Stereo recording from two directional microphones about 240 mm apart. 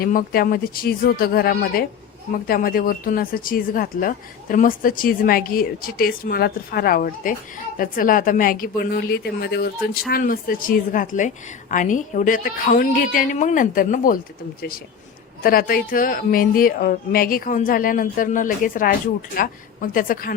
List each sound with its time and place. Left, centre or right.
0.0 s speech: left
15.4 s speech: left